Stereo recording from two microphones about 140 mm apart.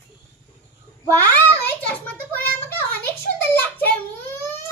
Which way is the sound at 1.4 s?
15° left (ahead or behind).